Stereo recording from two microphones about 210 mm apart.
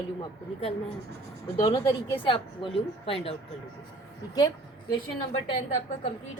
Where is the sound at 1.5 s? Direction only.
25° left (ahead or behind).